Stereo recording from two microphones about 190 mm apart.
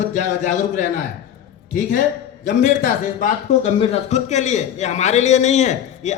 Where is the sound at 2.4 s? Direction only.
40° left (ahead or behind).